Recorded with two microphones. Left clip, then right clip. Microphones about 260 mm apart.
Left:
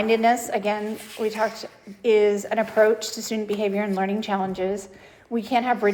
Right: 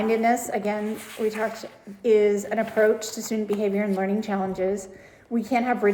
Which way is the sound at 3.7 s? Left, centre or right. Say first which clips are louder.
Left 1 dB; centre.